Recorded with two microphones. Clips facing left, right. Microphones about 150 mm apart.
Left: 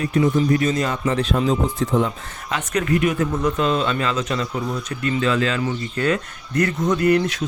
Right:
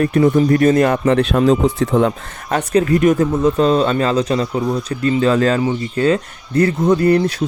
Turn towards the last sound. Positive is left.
turn(degrees=-35)  # may be behind; listen again after turning